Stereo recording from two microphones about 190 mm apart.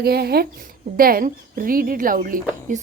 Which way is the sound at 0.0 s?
55° right (ahead or behind).